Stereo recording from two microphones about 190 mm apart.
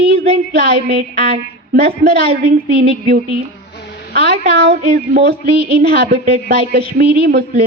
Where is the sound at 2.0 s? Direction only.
55° right (ahead or behind).